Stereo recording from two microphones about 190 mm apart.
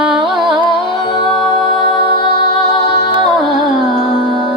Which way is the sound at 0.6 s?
25° left (ahead or behind).